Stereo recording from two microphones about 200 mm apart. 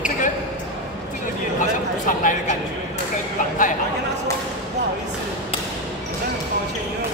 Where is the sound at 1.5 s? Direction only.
40° left (ahead or behind).